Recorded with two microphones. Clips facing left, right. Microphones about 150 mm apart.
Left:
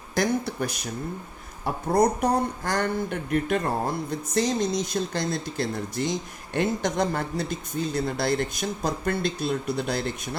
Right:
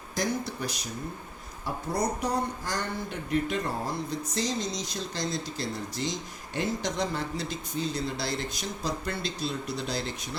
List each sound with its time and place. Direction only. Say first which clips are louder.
0.1 s speech: left 5 dB; 60° left (ahead or behind)